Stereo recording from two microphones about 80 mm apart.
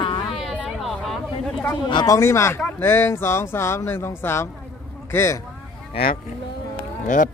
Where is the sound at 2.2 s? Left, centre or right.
Left.